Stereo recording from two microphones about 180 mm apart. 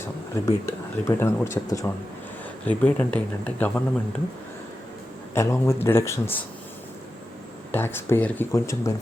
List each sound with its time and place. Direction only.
0.4 s speech: 15° left (ahead or behind)
2.6 s speech: 5° left (ahead or behind)
5.3 s speech: 15° left (ahead or behind)
7.7 s speech: 10° left (ahead or behind)